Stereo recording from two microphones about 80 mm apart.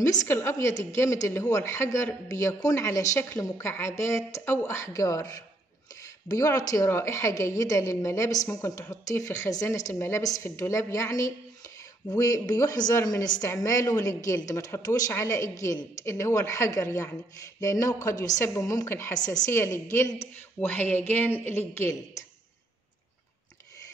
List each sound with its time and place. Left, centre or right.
0.0 s speech: left
0.3 s a woman's voice: left
3.2 s a woman's voice: left
9.9 s a woman's voice: left
18.4 s a woman's voice: left
19.1 s speech: left
19.5 s a woman's voice: left